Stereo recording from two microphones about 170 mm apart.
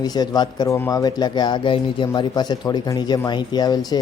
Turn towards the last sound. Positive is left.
turn(degrees=25)  # may be behind; listen again after turning